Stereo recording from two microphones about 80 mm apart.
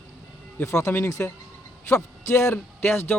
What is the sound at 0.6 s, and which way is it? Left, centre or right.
A man's voice, left.